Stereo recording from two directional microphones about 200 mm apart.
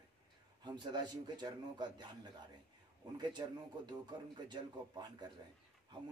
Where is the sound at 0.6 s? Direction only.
20° right (ahead or behind).